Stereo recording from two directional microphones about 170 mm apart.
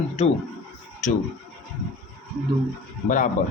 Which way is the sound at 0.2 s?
40° left (ahead or behind).